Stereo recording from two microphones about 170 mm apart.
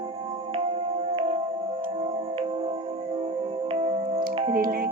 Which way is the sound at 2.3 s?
35° right (ahead or behind).